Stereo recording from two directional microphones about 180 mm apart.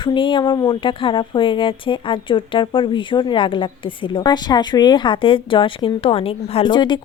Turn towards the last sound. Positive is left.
turn(degrees=25)  # may be behind; listen again after turning